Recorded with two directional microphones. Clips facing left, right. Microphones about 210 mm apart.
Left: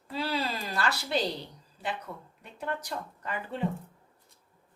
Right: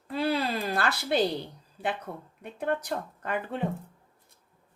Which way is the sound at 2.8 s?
55° right (ahead or behind).